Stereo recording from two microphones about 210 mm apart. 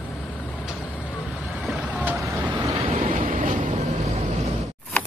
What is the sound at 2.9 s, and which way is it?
Vehicle, 35° right (ahead or behind).